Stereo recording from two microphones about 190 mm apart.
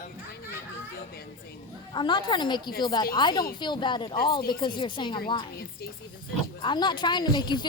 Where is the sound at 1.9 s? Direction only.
25° left (ahead or behind).